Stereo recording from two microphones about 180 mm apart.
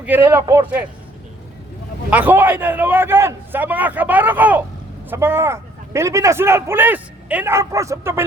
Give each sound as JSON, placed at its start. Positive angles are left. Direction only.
{"t": 0.0, "sound": "speech", "side_deg": -10}
{"t": 2.0, "sound": "speech", "side_deg": -10}